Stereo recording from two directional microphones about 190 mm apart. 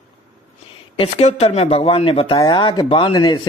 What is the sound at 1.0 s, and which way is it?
Speech, 35° left (ahead or behind).